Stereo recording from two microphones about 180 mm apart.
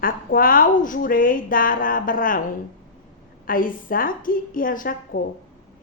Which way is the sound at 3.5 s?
50° left (ahead or behind).